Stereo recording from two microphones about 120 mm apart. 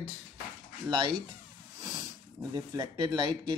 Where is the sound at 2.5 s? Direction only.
35° right (ahead or behind).